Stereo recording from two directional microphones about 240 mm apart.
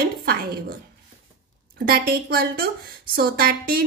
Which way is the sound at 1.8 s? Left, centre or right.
Right.